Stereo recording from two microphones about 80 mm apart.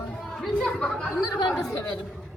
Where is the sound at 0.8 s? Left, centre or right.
Centre.